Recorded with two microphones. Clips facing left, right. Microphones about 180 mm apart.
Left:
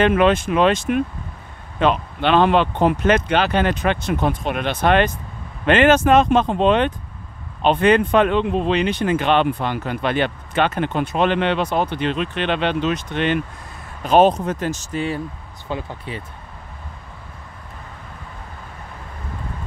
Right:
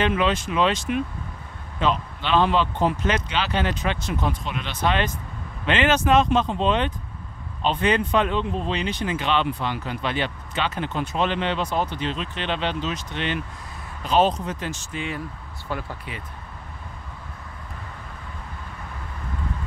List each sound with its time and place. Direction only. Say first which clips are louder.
0.0 s speech: left 7 dB; 55° left (ahead or behind); by 15.2 s 35° left (ahead or behind)
15.7 s speech: left 4 dB; 20° left (ahead or behind)